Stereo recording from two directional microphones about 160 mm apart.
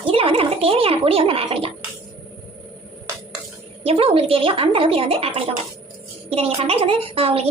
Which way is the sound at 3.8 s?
35° right (ahead or behind).